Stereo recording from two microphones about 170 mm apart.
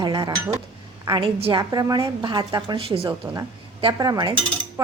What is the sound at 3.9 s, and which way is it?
Speech, 20° right (ahead or behind).